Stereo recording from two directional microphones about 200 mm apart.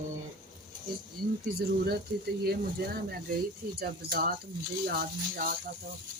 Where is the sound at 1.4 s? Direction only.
50° right (ahead or behind).